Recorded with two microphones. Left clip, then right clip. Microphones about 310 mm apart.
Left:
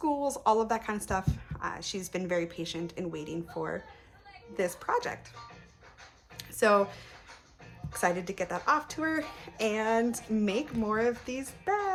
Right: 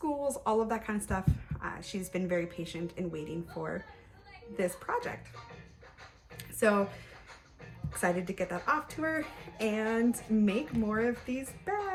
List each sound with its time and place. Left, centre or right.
0.4 s speech: centre
6.6 s speech: centre
8.0 s speech: centre